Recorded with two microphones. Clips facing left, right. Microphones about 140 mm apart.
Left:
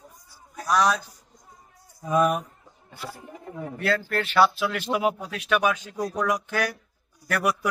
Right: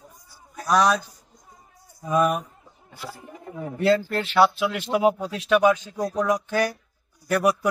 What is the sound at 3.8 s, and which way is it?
Speech, 25° right (ahead or behind).